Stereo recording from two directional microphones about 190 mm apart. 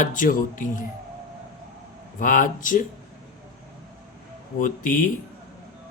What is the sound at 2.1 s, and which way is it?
Speech, 45° left (ahead or behind).